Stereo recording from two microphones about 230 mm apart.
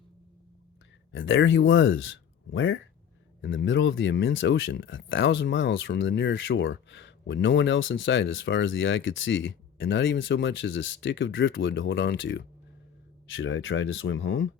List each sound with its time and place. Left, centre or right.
1.1 s speech: left